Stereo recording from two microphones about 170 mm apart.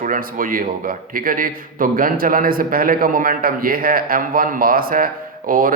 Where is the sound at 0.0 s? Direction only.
55° right (ahead or behind).